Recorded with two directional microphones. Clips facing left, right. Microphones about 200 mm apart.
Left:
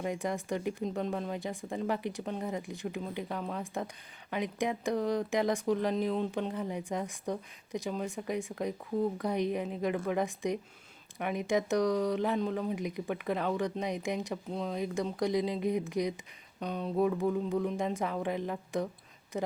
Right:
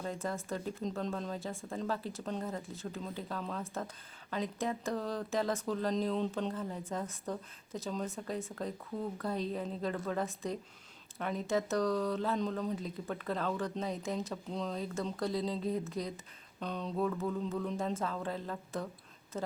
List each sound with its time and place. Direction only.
0.0 s speech: 15° left (ahead or behind)